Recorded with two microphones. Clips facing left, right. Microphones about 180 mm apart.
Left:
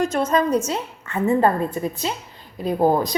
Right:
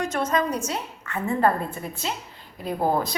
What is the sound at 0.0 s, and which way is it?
A woman's voice, 30° left (ahead or behind).